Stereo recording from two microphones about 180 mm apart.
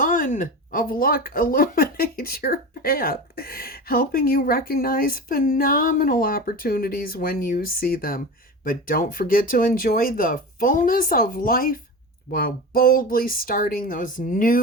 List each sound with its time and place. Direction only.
0.0 s speech: 50° left (ahead or behind)